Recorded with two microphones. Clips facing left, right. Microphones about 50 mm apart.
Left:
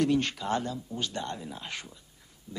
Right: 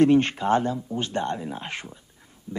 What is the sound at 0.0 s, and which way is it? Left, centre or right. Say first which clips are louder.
Speech: right 8 dB; right.